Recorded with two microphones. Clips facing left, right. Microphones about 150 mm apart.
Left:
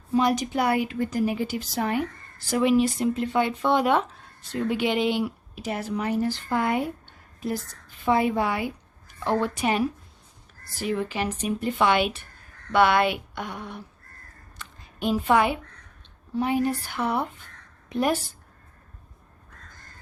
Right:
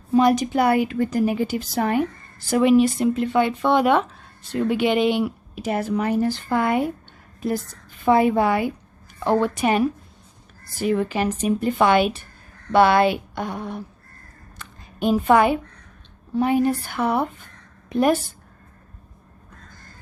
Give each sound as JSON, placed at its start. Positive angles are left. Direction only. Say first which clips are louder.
{"t": 0.2, "sound": "a woman's voice", "louder": "right 5 dB", "side_deg": -55}
{"t": 4.5, "sound": "speech", "louder": "right 5 dB", "side_deg": -60}
{"t": 8.0, "sound": "a woman's voice", "louder": "right 5 dB", "side_deg": -50}
{"t": 14.6, "sound": "a sound", "louder": "right 5 dB", "side_deg": -50}
{"t": 16.4, "sound": "a woman's voice", "louder": "right 5 dB", "side_deg": -55}